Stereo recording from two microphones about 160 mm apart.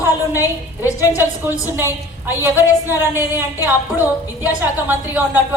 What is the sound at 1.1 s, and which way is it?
A woman's voice, 15° right (ahead or behind).